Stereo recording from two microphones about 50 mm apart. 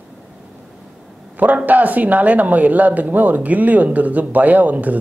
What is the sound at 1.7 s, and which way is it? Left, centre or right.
Speech, right.